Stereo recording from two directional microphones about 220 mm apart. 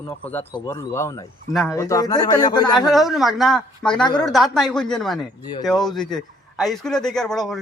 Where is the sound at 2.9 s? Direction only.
Centre (ahead or behind).